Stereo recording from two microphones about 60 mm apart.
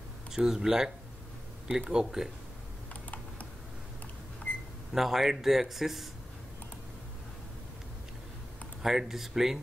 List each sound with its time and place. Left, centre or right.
0.3 s speech: centre
2.9 s computer keyboard: left
4.5 s cash register: left
4.9 s a man's voice: centre
8.8 s a man's voice: centre